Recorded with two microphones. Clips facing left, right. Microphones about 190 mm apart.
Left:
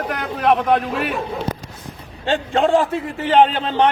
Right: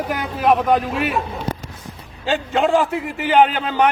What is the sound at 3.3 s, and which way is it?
Speech, 30° left (ahead or behind).